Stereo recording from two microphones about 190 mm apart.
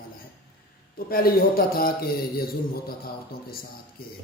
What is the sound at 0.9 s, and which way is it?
A man's voice, 50° left (ahead or behind).